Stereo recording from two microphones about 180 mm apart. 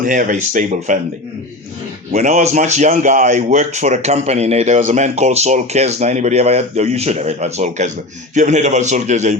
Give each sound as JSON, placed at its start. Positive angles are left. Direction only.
{"t": 0.0, "sound": "speech", "side_deg": -45}
{"t": 2.1, "sound": "speech", "side_deg": -40}